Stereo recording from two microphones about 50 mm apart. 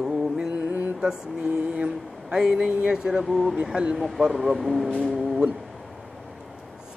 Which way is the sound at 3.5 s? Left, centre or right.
Centre.